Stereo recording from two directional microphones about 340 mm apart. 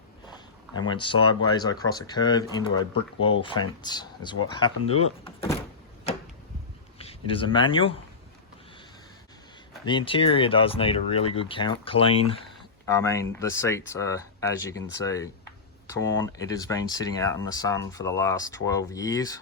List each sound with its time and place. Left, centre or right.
0.8 s speech: centre
7.0 s speech: centre
9.8 s speech: centre